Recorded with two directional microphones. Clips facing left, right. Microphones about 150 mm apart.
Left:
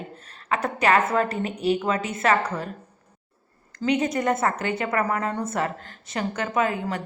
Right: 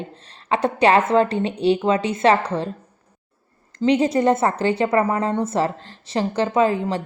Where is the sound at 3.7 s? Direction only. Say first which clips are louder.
Right 6 dB; 30° right (ahead or behind).